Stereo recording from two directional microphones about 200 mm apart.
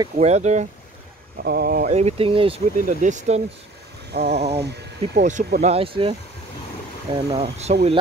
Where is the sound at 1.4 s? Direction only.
55° right (ahead or behind).